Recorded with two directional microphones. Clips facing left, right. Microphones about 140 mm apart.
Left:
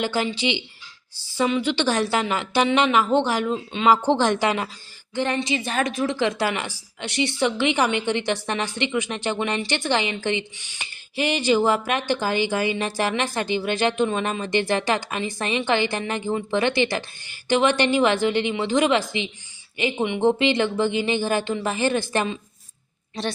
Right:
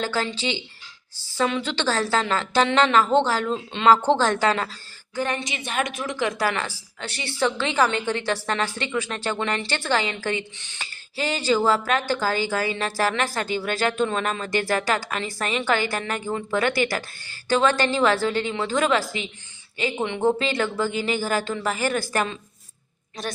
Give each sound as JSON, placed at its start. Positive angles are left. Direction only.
{"t": 0.0, "sound": "speech", "side_deg": 15}
{"t": 5.1, "sound": "a woman's voice", "side_deg": 30}